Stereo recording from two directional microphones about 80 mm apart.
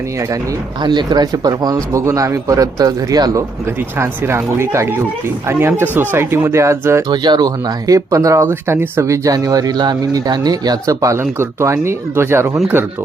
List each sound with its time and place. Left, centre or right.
0.2 s speech: right
0.8 s speech: right
3.7 s speech: right
7.1 s speech: right
7.9 s speech: right
11.2 s speech: right